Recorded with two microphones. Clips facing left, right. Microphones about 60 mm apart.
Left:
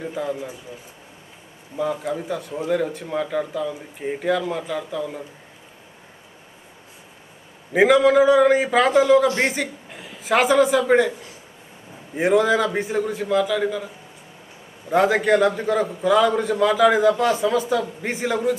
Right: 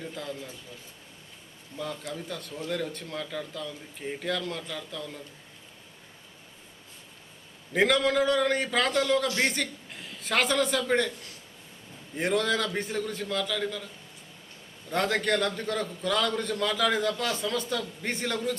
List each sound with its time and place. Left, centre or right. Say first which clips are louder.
0.0 s speech: left 10 dB; centre
7.7 s a woman's voice: left 9 dB; centre